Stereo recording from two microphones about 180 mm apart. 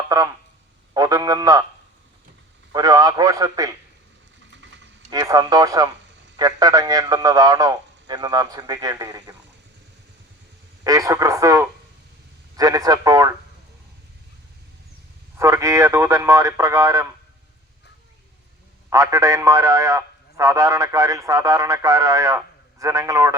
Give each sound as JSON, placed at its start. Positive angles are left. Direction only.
{"t": 0.9, "sound": "a sound", "side_deg": -20}
{"t": 2.7, "sound": "radio", "side_deg": -20}
{"t": 4.5, "sound": "vehicle", "side_deg": -90}
{"t": 5.1, "sound": "a man's voice", "side_deg": -20}
{"t": 10.8, "sound": "a man's voice", "side_deg": -20}
{"t": 15.4, "sound": "speech", "side_deg": -15}
{"t": 18.9, "sound": "a man's voice", "side_deg": -15}